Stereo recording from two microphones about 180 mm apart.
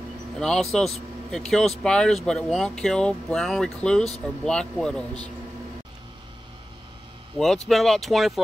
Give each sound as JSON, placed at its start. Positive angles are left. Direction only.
{"t": 0.4, "sound": "speech", "side_deg": 5}
{"t": 7.3, "sound": "speech", "side_deg": 0}